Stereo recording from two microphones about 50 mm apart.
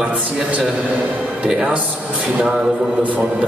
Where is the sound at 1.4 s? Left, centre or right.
Centre.